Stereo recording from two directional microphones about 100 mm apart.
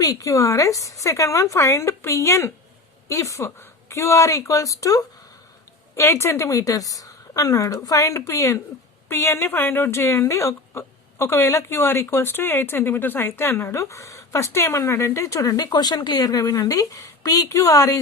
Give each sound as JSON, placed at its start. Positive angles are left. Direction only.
{"t": 0.0, "sound": "a woman's voice", "side_deg": 35}